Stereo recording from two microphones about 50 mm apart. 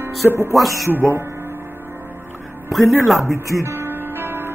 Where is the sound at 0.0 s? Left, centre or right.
Right.